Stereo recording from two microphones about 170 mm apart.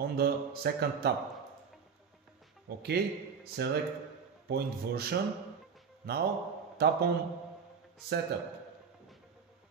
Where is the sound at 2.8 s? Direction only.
70° right (ahead or behind).